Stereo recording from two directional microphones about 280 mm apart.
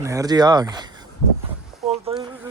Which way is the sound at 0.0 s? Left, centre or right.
Centre.